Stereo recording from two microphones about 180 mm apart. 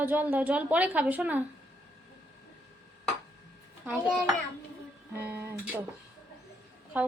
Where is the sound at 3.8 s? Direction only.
10° right (ahead or behind).